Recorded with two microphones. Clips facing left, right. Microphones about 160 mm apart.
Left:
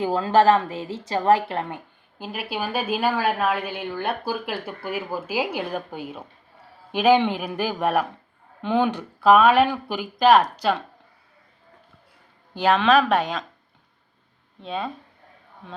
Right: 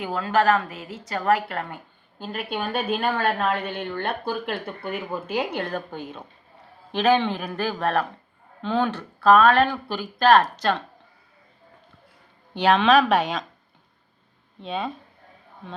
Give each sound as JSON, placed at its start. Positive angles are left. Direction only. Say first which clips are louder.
{"t": 0.0, "sound": "a woman's voice", "louder": "left 4 dB", "side_deg": 30}
{"t": 2.1, "sound": "a woman's voice", "louder": "even", "side_deg": 5}
{"t": 12.5, "sound": "a woman's voice", "louder": "even", "side_deg": 0}
{"t": 14.6, "sound": "a woman's voice", "louder": "even", "side_deg": 0}